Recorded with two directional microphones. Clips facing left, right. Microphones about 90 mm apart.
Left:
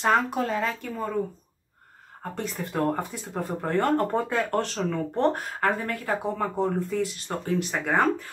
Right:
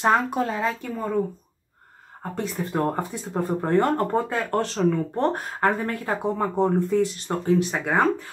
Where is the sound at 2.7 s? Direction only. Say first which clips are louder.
Right 1 dB; 30° right (ahead or behind).